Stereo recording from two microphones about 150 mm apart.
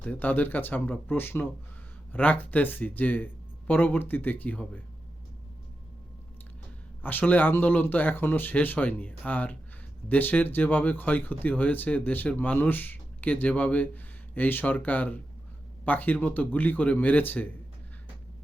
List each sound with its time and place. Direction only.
0.0 s speech: 10° left (ahead or behind)
7.0 s speech: 10° left (ahead or behind)